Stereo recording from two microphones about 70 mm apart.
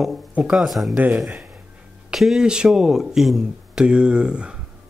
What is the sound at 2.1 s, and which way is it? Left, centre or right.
Speech, centre.